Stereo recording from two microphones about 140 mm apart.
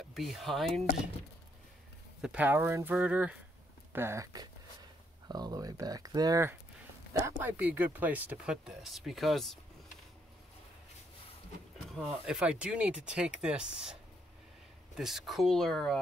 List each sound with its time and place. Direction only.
0.0 s speech: centre (ahead or behind)
2.2 s speech: 10° right (ahead or behind)
11.8 s speech: centre (ahead or behind)
15.0 s speech: centre (ahead or behind)